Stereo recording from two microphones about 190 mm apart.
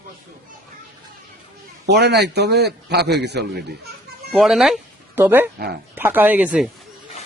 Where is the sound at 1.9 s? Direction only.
60° right (ahead or behind).